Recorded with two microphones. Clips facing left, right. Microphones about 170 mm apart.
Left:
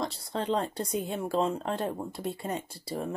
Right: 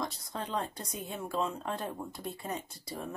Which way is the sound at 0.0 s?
30° left (ahead or behind).